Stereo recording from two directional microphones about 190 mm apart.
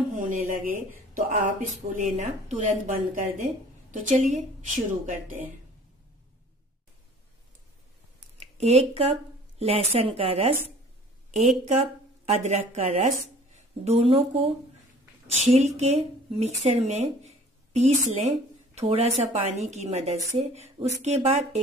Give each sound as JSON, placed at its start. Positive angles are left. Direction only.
{"t": 0.3, "sound": "a woman's voice", "side_deg": -45}
{"t": 8.4, "sound": "a woman's voice", "side_deg": -35}